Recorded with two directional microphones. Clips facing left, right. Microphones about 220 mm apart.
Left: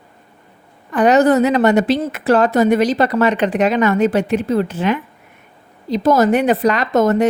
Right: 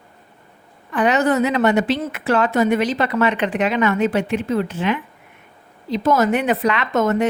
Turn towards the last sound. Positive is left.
turn(degrees=35)  # may be behind; listen again after turning